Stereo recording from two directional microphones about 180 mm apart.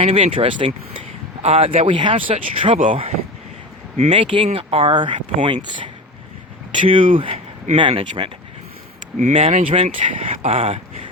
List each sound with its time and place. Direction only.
0.0 s speech: 35° right (ahead or behind)
6.7 s speech: 30° right (ahead or behind)